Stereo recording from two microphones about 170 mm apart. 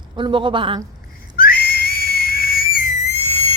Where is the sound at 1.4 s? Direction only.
60° left (ahead or behind).